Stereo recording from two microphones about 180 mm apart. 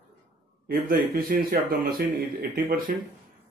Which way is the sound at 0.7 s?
55° right (ahead or behind).